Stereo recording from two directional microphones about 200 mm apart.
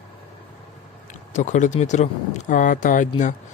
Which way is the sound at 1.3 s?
40° left (ahead or behind).